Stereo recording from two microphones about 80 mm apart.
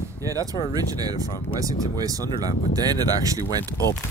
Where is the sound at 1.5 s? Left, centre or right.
Right.